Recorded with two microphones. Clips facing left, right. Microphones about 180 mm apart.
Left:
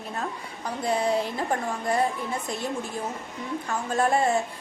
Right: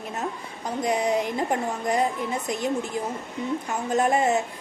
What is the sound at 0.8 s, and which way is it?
A woman's voice, 15° right (ahead or behind).